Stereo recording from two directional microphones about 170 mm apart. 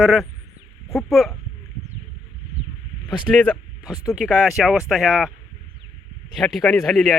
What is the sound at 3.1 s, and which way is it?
Speech, 5° left (ahead or behind).